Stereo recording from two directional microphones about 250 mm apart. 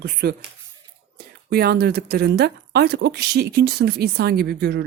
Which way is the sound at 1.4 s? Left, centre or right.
Right.